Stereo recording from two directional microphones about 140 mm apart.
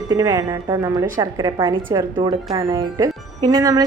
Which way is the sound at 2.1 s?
35° right (ahead or behind).